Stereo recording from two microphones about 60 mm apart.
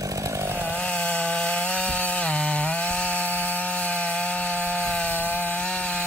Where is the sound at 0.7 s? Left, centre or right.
Left.